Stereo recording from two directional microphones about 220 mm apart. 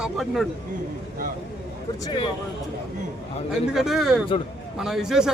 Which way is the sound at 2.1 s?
20° left (ahead or behind).